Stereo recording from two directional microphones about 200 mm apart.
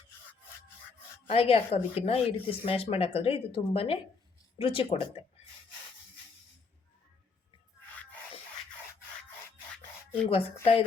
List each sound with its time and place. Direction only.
1.3 s speech: 30° left (ahead or behind)
10.2 s speech: 30° left (ahead or behind)